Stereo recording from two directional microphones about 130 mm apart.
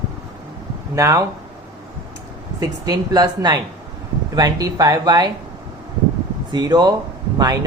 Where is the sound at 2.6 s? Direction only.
30° right (ahead or behind).